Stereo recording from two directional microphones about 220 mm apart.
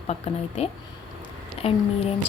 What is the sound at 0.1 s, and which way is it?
Speech, 30° left (ahead or behind).